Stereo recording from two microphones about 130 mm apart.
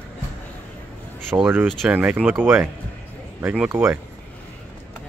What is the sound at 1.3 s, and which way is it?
Speech, 15° right (ahead or behind).